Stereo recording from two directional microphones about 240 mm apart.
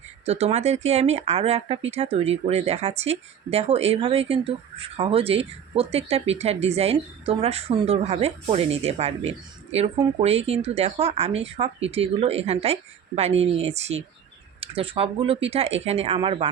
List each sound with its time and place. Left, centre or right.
0.3 s speech: right